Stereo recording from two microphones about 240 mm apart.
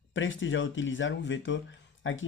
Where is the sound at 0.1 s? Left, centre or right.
Left.